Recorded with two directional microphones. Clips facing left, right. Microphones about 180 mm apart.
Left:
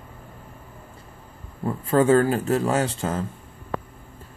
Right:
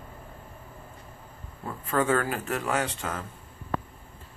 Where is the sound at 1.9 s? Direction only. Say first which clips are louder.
Left 8 dB; 30° left (ahead or behind).